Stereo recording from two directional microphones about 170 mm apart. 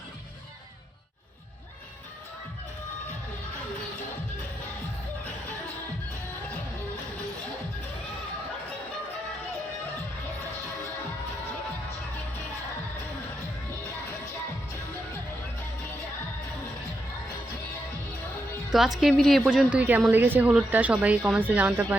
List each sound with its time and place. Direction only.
18.7 s a woman's voice: centre (ahead or behind)